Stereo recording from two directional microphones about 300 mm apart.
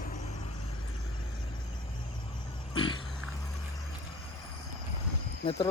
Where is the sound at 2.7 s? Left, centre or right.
Centre.